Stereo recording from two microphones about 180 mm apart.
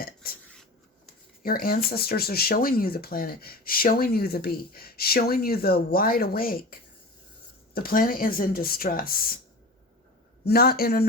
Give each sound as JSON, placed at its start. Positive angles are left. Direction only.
{"t": 0.0, "sound": "a sound", "side_deg": 55}
{"t": 1.4, "sound": "speech", "side_deg": 55}
{"t": 10.4, "sound": "speech", "side_deg": 60}